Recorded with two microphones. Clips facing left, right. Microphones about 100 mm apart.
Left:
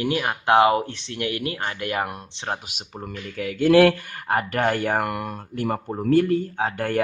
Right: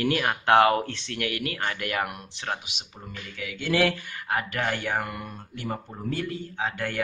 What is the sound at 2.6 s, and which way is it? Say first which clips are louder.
Speech: left 7 dB; 45° left (ahead or behind).